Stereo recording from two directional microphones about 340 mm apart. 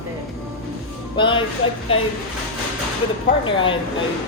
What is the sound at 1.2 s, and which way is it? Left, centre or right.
Speech, centre.